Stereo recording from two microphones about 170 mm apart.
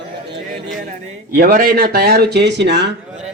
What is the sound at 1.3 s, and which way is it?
A man's voice, 60° right (ahead or behind).